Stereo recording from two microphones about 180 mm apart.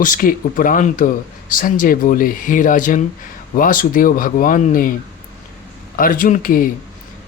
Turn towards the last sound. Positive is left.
turn(degrees=50)  # may be behind; listen again after turning